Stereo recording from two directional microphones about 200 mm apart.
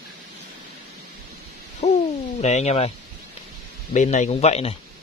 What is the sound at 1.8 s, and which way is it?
Owl, 35° left (ahead or behind).